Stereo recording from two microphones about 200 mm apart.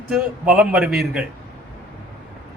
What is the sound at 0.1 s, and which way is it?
Speech, 5° right (ahead or behind).